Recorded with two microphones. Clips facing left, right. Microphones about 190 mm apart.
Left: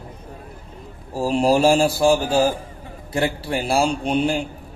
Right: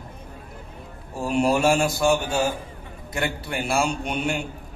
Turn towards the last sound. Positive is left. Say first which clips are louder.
# left 6 dB
turn(degrees=30)  # may be behind; listen again after turning